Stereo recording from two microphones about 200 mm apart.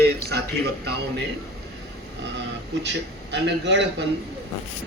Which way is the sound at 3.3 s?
60° right (ahead or behind).